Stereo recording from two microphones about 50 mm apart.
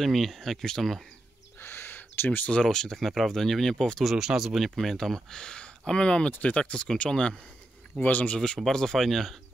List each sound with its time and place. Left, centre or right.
0.0 s speech: centre
1.6 s a sound: left
2.6 s speech: centre
4.1 s speech: centre
8.0 s speech: left
8.7 s speech: centre